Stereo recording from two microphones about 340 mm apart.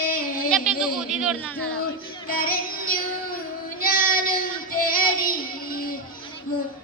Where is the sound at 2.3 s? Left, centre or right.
Left.